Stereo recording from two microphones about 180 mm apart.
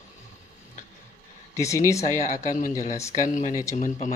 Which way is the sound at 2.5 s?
45° left (ahead or behind).